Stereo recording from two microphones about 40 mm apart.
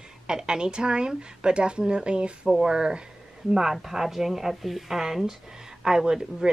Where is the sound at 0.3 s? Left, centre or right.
Centre.